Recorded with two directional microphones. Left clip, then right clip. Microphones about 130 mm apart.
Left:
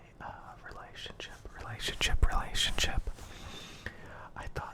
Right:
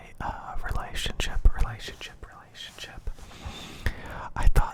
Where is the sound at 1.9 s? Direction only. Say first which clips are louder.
Left 10 dB; 55° left (ahead or behind); by 2.9 s 90° left.